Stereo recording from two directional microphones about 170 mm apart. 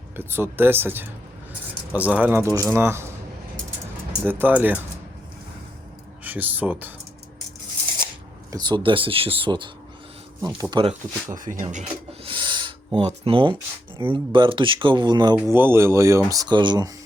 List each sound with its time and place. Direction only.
0.2 s speech: 15° right (ahead or behind)
4.2 s speech: 10° right (ahead or behind)
6.2 s speech: 10° right (ahead or behind)
8.4 s speech: 25° right (ahead or behind)
11.3 s speech: 50° right (ahead or behind)
12.3 s a sound: 25° right (ahead or behind)
14.0 s speech: 30° right (ahead or behind)
15.4 s speech: 10° right (ahead or behind)